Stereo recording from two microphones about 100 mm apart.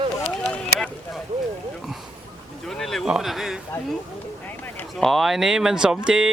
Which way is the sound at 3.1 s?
5° right (ahead or behind).